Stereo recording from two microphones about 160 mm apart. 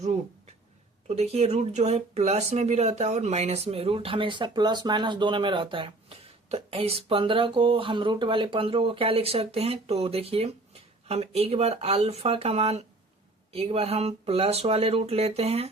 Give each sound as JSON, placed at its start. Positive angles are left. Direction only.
{"t": 1.0, "sound": "speech", "side_deg": -40}